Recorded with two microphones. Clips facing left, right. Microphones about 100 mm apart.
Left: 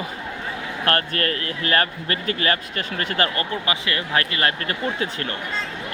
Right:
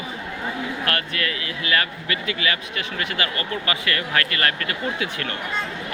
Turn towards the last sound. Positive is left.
turn(degrees=35)  # may be behind; listen again after turning